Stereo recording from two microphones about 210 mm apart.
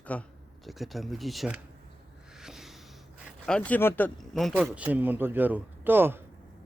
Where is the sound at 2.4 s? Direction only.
Centre (ahead or behind).